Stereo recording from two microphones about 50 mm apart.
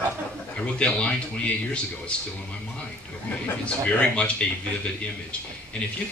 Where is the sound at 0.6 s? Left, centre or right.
Left.